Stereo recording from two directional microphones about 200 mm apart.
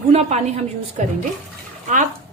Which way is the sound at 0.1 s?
30° right (ahead or behind).